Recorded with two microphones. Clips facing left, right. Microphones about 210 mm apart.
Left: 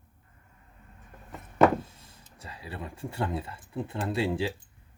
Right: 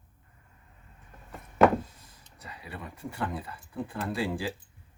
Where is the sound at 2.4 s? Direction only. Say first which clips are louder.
Left 2 dB; 30° left (ahead or behind).